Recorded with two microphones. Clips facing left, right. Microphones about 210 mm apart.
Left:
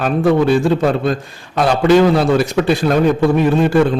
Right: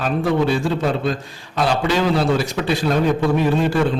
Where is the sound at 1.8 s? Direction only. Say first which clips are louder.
Left 9 dB; 55° left (ahead or behind).